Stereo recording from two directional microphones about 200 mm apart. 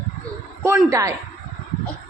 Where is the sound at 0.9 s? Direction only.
15° right (ahead or behind).